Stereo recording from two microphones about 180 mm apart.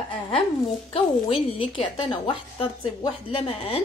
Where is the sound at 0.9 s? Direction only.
30° left (ahead or behind).